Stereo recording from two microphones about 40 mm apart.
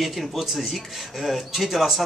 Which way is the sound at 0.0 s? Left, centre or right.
Centre.